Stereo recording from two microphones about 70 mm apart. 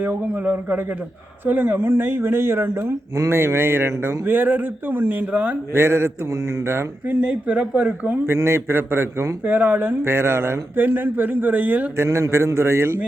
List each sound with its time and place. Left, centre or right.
0.0 s a man's voice: right
5.7 s speech: right
7.2 s a man's voice: centre
8.3 s speech: right
9.4 s a man's voice: right
10.0 s a man's voice: right
11.9 s speech: right